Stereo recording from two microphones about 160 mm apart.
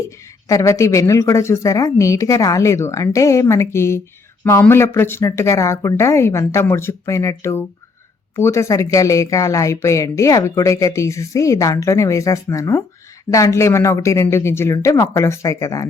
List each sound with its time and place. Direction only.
0.0 s a woman's voice: 20° left (ahead or behind)